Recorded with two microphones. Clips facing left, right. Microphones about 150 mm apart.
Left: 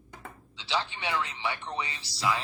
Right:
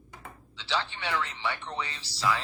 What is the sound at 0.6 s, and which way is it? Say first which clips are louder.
Speech: even; 15° left (ahead or behind).